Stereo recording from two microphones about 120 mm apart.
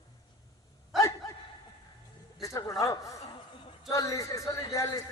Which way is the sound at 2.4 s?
25° left (ahead or behind).